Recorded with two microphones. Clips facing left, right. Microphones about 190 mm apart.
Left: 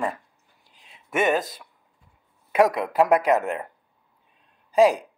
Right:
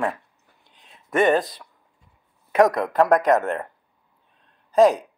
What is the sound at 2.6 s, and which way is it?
Speech, 5° left (ahead or behind).